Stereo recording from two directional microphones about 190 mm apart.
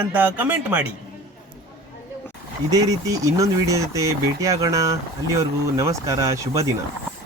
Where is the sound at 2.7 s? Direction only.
20° right (ahead or behind).